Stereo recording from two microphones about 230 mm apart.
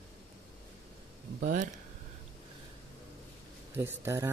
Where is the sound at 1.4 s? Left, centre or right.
Right.